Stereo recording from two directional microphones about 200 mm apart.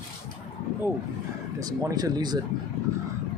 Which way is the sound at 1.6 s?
15° right (ahead or behind).